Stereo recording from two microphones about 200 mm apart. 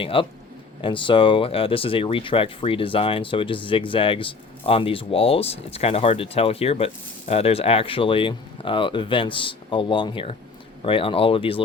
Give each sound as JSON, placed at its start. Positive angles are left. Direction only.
{"t": 0.0, "sound": "speech", "side_deg": 25}